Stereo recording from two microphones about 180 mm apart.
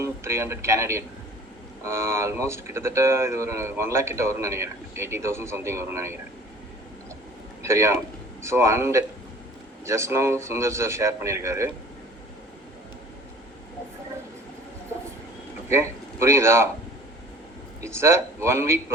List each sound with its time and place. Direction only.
0.0 s speech: 15° right (ahead or behind)
7.6 s speech: 15° right (ahead or behind)
16.2 s speech: 15° right (ahead or behind)
17.8 s speech: 15° right (ahead or behind)